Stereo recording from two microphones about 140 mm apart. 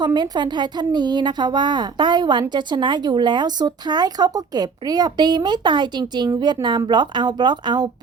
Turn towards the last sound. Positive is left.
turn(degrees=-30)  # may be behind; listen again after turning